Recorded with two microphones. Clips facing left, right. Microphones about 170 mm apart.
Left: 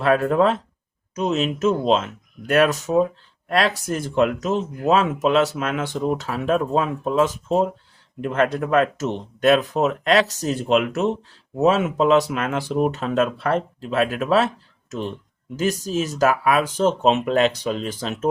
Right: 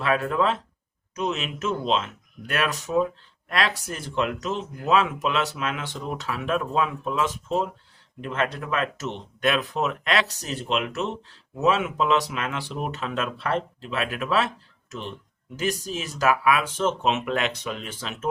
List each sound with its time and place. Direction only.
0.0 s speech: 45° left (ahead or behind)